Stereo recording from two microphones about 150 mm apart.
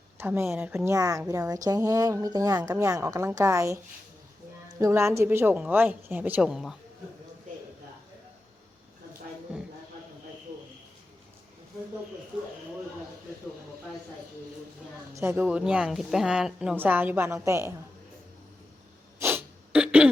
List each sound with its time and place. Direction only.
0.2 s a woman's voice: 15° right (ahead or behind)
4.8 s a woman's voice: 20° right (ahead or behind)
15.1 s a woman's voice: 15° right (ahead or behind)
19.2 s a sound: 15° right (ahead or behind)